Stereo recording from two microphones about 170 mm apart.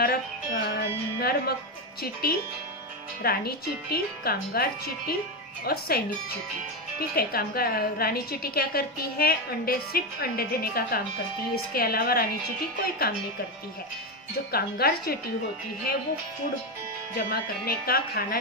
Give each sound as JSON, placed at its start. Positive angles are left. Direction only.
{"t": 0.0, "sound": "a woman's voice", "side_deg": 65}
{"t": 7.0, "sound": "a woman's voice", "side_deg": 65}
{"t": 14.5, "sound": "a woman's voice", "side_deg": 65}
{"t": 17.2, "sound": "a woman's voice", "side_deg": 65}